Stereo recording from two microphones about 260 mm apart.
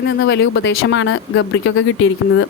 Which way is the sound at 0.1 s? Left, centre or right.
Left.